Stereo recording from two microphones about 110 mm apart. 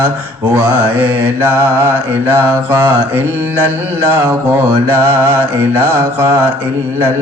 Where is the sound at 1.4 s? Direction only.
20° right (ahead or behind).